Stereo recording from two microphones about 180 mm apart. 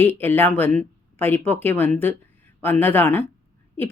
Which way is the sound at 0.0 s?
10° left (ahead or behind).